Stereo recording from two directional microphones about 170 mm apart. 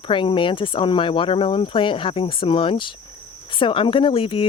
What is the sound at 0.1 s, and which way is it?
Speech, 30° left (ahead or behind).